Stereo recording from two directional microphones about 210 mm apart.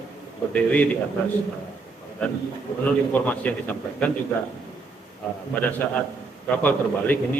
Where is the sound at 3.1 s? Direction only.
5° left (ahead or behind).